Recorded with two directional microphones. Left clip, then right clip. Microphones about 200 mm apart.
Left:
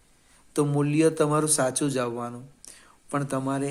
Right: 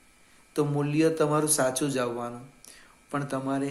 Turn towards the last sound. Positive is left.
turn(degrees=40)  # may be behind; listen again after turning